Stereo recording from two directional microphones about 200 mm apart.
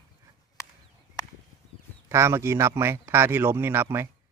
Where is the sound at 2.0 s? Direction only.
15° right (ahead or behind).